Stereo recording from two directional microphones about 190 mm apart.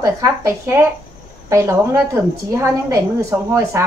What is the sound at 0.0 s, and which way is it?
Speech, 15° right (ahead or behind).